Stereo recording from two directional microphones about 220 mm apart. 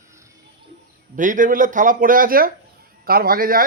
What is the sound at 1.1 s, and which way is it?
Speech, 35° right (ahead or behind).